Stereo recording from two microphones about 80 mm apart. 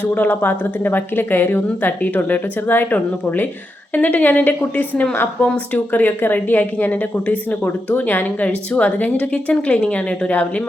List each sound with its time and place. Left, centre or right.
0.0 s speech: left